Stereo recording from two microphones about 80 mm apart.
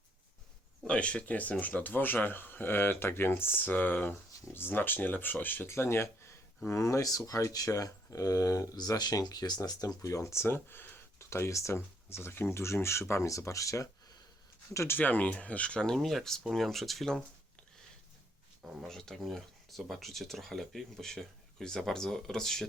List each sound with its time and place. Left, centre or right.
0.9 s speech: centre; by 14.9 s left
14.9 s speech: left; by 17.2 s centre
18.9 s speech: centre